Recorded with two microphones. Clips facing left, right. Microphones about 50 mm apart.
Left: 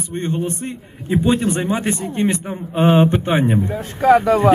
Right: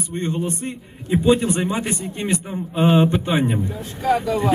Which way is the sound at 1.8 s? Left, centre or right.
Left.